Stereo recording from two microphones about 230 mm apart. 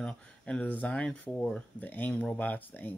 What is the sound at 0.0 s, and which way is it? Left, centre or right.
Speech, centre.